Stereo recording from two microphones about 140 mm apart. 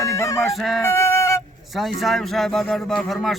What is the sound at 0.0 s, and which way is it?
Music, 20° left (ahead or behind).